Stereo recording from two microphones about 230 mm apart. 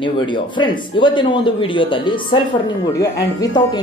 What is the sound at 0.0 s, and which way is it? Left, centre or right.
A man's voice, left.